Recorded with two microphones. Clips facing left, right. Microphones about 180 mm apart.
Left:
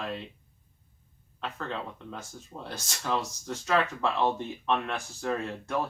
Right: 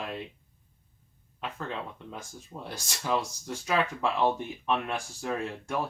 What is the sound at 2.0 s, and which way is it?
Speech, 10° right (ahead or behind).